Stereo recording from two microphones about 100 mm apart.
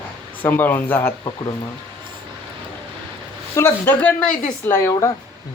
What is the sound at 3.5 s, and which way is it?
Speech, 20° left (ahead or behind).